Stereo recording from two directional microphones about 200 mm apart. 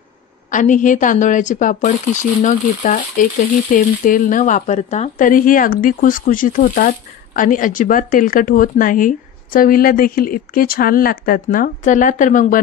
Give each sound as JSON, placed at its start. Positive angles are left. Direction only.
{"t": 0.5, "sound": "a woman's voice", "side_deg": 40}